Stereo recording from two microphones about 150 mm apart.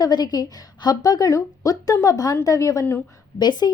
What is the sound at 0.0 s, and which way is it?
Speech, 25° left (ahead or behind).